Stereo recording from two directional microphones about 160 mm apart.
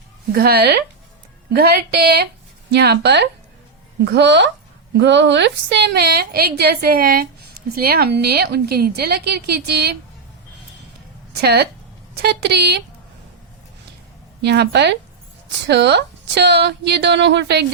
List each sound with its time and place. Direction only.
0.3 s a woman's voice: 75° right (ahead or behind)
2.6 s a woman's voice: 90° right
11.3 s a woman's voice: 90° right
14.4 s a woman's voice: 90° right